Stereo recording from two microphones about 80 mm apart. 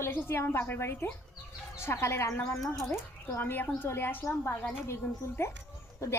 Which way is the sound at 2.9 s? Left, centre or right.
Left.